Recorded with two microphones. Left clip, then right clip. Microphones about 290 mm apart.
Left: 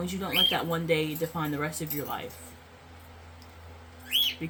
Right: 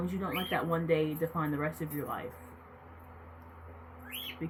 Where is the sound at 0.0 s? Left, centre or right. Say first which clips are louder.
Left 10 dB; centre.